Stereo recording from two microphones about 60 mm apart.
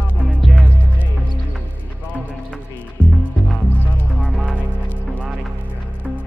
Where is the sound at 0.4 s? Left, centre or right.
Centre.